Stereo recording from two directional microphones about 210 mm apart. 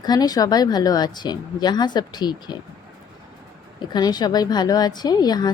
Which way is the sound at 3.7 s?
20° left (ahead or behind).